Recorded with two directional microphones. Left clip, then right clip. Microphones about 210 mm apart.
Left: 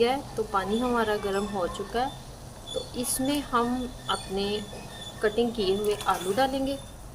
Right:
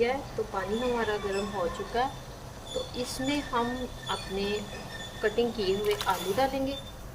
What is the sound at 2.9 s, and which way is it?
A woman's voice, 20° left (ahead or behind).